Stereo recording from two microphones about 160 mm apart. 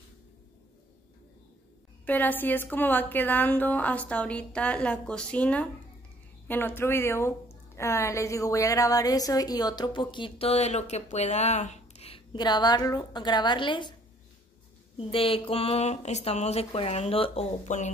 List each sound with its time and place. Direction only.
2.0 s a woman's voice: 10° left (ahead or behind); by 13.9 s 30° left (ahead or behind)
15.0 s speech: 35° left (ahead or behind)